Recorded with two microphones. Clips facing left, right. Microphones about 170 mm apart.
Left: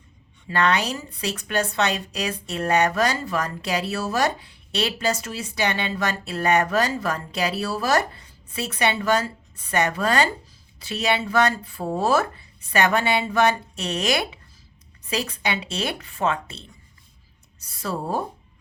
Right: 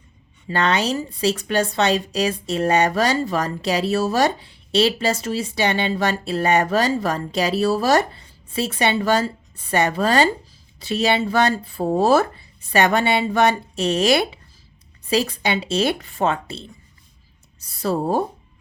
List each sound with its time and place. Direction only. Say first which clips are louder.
0.4 s a woman's voice: right 2 dB; 30° right (ahead or behind)